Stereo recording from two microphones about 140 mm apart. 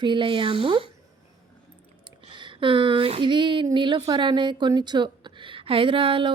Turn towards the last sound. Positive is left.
turn(degrees=-40)  # may be behind; listen again after turning